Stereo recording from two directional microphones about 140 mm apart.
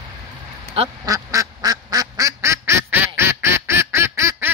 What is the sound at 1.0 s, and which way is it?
Quack, 25° right (ahead or behind).